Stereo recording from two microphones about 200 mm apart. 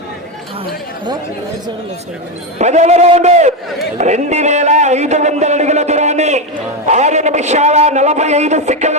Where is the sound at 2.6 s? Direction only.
35° right (ahead or behind).